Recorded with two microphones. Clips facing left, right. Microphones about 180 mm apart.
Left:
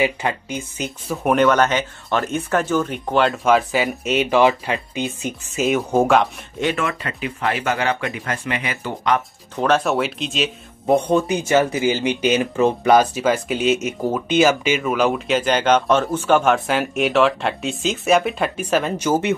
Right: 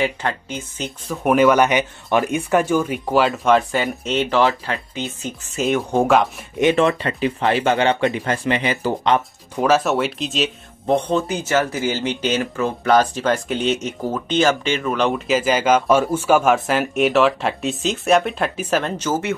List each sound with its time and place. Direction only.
0.0 s speech: 10° left (ahead or behind)
5.6 s speech: 5° left (ahead or behind)
6.6 s speech: 25° right (ahead or behind)
9.6 s speech: 5° right (ahead or behind)
11.0 s speech: 10° left (ahead or behind)